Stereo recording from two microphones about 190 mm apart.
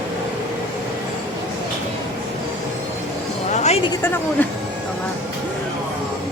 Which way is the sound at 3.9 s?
10° left (ahead or behind).